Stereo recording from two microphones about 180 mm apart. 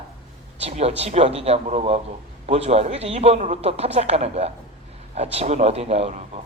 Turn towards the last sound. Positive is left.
turn(degrees=-35)  # may be behind; listen again after turning